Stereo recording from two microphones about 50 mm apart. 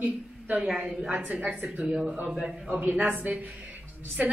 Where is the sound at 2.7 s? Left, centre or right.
Right.